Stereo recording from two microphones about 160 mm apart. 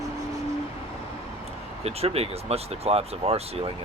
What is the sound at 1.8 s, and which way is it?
Speech, 40° right (ahead or behind).